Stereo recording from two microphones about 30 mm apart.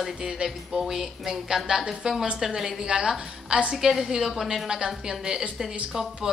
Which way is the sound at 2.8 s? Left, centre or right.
Right.